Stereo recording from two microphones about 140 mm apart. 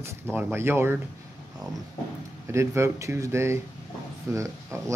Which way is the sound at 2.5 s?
20° right (ahead or behind).